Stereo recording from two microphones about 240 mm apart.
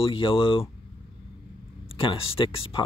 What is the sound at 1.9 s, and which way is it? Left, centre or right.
Speech, left.